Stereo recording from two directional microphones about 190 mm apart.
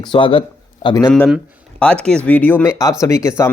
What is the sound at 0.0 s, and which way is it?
A man's voice, 25° left (ahead or behind).